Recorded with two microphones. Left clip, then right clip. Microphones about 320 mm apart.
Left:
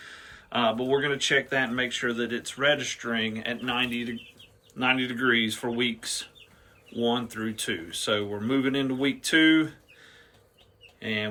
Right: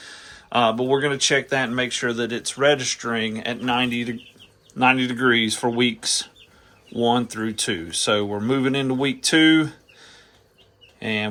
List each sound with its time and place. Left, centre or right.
0.0 s speech: centre